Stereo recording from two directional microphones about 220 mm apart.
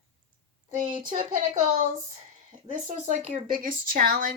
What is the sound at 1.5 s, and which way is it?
Speech, 35° right (ahead or behind).